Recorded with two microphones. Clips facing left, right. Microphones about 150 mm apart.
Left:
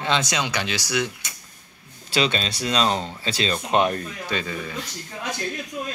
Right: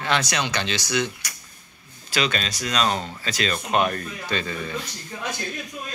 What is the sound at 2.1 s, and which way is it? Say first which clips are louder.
Speech: left 2 dB; 30° left (ahead or behind).